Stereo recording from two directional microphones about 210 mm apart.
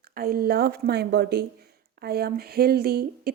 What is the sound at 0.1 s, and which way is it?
A woman's voice, 45° right (ahead or behind).